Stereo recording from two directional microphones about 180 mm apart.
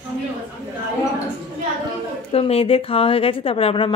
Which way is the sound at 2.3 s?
30° left (ahead or behind).